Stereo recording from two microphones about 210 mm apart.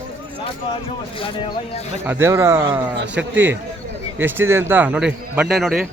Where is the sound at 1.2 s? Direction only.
25° left (ahead or behind).